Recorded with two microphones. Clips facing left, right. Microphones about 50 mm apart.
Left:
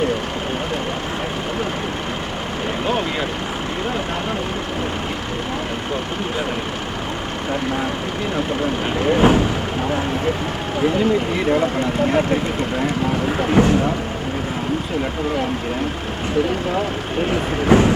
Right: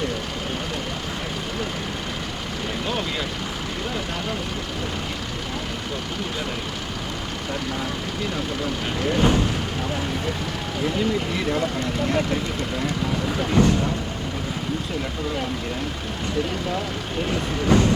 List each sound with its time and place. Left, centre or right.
8.6 s speech: left
9.2 s vehicle: centre
10.8 s speech: left
12.7 s speech: left
17.2 s speech: left